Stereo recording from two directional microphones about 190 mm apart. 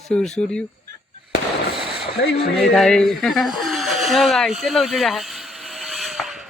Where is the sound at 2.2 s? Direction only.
65° left (ahead or behind).